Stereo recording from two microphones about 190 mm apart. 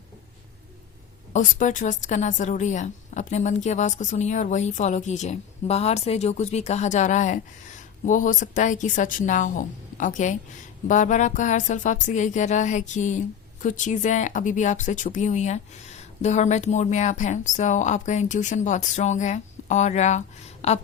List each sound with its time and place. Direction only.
1.3 s speech: 40° left (ahead or behind)